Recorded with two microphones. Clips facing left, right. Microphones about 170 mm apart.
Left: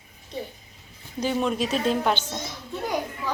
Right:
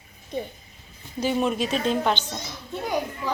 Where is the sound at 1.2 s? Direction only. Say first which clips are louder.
Right 1 dB; 5° right (ahead or behind).